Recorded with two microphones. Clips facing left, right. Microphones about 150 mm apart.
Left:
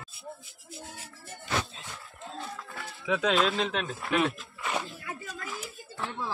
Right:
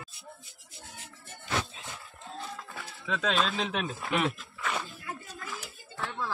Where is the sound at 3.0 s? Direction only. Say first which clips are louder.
Left 4 dB; 5° left (ahead or behind).